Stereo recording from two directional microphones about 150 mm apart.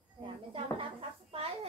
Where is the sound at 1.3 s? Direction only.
40° right (ahead or behind).